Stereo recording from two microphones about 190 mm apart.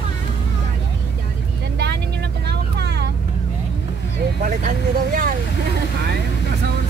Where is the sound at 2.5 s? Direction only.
60° right (ahead or behind).